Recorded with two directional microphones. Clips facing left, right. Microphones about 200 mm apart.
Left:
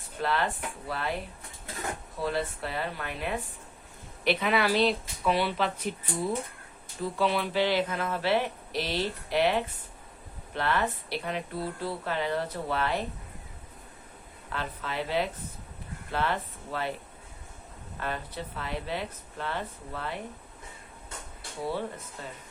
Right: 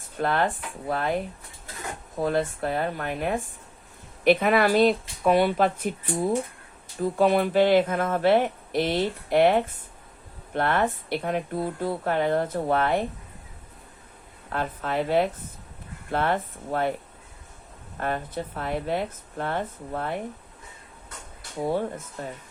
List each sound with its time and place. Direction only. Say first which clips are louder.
0.2 s speech: right 4 dB; 50° right (ahead or behind)
2.1 s speech: right 7 dB; 50° right (ahead or behind)
14.5 s speech: right 7 dB; 50° right (ahead or behind)
18.0 s speech: right 6 dB; 50° right (ahead or behind)
21.6 s speech: right 6 dB; 45° right (ahead or behind)